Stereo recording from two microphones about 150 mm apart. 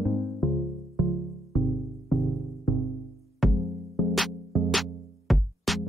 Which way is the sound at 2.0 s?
Centre (ahead or behind).